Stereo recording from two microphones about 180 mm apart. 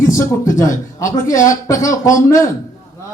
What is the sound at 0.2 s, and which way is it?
A man's voice, 20° left (ahead or behind).